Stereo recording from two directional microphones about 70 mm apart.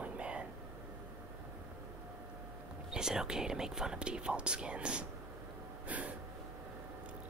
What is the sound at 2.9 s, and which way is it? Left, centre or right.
Speech, centre.